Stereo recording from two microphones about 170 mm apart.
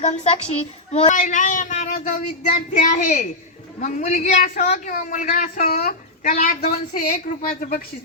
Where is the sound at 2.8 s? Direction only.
45° left (ahead or behind).